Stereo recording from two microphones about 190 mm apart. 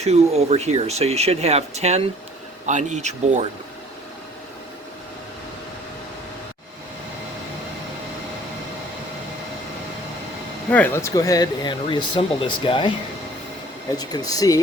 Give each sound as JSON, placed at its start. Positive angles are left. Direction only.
{"t": 0.0, "sound": "speech", "side_deg": -35}
{"t": 10.7, "sound": "speech", "side_deg": 10}
{"t": 13.9, "sound": "speech", "side_deg": 20}